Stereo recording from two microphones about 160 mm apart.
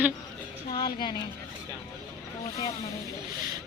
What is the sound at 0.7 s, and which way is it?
Speech, 30° left (ahead or behind).